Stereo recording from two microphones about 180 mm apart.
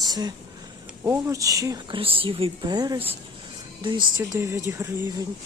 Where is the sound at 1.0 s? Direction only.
15° right (ahead or behind).